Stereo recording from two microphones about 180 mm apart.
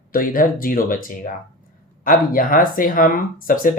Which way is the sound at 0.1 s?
50° left (ahead or behind).